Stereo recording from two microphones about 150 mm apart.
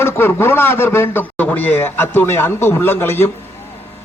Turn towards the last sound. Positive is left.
turn(degrees=15)  # may be behind; listen again after turning